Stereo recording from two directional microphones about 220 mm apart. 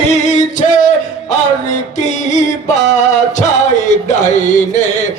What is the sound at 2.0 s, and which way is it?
Music, 30° left (ahead or behind).